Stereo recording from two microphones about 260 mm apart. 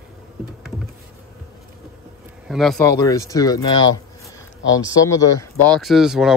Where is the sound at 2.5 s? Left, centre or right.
Centre.